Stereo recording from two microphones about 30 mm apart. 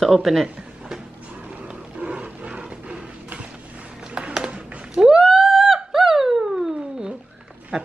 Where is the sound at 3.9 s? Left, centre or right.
Right.